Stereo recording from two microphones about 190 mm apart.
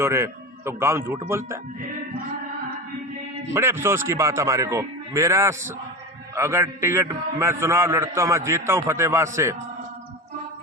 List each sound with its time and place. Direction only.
0.0 s a man's voice: 15° right (ahead or behind)
3.5 s a man's voice: 10° right (ahead or behind)